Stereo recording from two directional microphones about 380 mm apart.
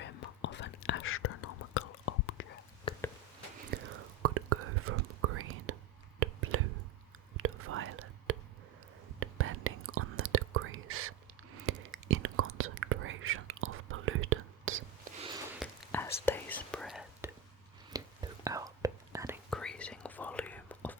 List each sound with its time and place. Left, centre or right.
0.0 s whispering: left
2.9 s a sound: centre
3.7 s whispering: right
4.2 s whispering: right
15.5 s whispering: centre